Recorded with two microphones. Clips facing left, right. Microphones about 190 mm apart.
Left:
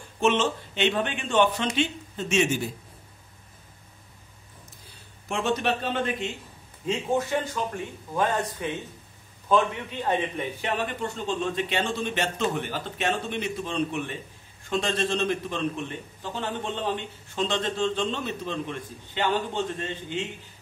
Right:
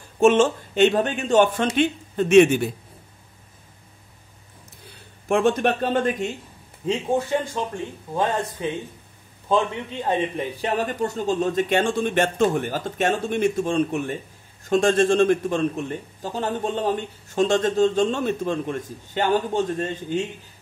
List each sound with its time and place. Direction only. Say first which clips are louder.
0.2 s a man's voice: right 7 dB; 50° right (ahead or behind)
5.3 s a man's voice: right 7 dB; 50° right (ahead or behind)
7.2 s speech: right 3 dB; 30° right (ahead or behind)
10.0 s a man's voice: right 3 dB; 35° right (ahead or behind)